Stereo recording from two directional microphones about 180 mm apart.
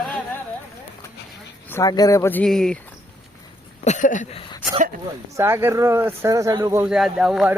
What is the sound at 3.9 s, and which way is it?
Speech, 45° left (ahead or behind).